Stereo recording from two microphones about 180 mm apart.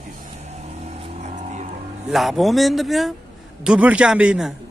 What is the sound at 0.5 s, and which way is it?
Vehicle, 35° right (ahead or behind).